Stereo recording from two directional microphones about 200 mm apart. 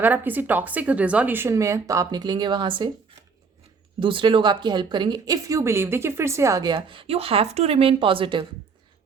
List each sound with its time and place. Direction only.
0.0 s speech: 10° right (ahead or behind)
4.0 s speech: 25° right (ahead or behind)